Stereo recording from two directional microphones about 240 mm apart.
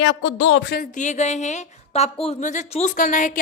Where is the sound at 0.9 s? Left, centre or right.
Left.